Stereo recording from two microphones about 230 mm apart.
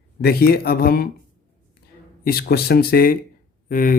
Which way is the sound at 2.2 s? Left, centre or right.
Left.